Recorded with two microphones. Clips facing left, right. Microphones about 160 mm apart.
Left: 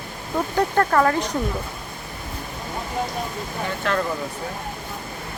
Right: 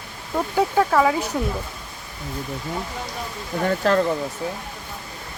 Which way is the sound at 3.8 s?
35° right (ahead or behind).